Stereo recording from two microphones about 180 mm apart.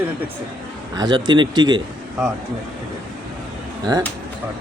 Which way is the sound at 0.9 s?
25° right (ahead or behind).